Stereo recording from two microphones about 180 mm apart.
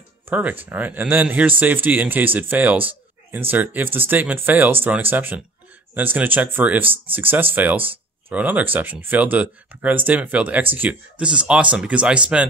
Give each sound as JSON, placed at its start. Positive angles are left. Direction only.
{"t": 0.3, "sound": "speech", "side_deg": -10}
{"t": 6.8, "sound": "speech", "side_deg": -30}
{"t": 7.2, "sound": "speech", "side_deg": -10}